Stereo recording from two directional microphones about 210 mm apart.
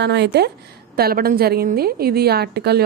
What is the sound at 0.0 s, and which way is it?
A woman's voice, 55° right (ahead or behind).